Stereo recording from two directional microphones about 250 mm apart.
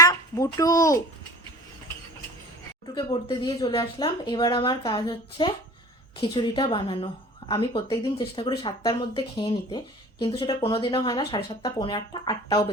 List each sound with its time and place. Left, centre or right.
0.0 s a child's voice: centre
2.9 s a woman's voice: centre